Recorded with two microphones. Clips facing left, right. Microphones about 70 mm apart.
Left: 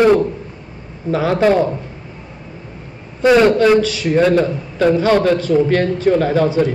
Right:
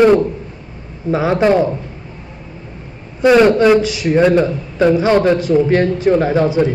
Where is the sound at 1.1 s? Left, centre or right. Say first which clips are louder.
Right 1 dB; centre.